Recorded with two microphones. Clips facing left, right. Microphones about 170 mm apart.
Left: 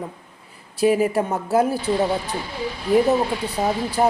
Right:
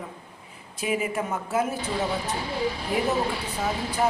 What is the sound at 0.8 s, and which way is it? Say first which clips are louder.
A woman's voice: left 9 dB; 35° left (ahead or behind).